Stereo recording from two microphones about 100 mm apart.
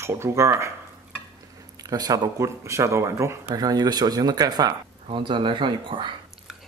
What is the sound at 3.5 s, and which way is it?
Speech, 45° right (ahead or behind).